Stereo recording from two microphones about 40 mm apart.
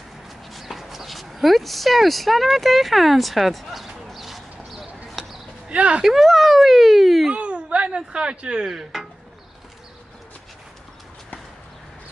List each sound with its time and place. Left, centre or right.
0.5 s clip-clop: centre
5.7 s speech: right
6.0 s speech: centre
7.3 s a sound: right
8.6 s speech: centre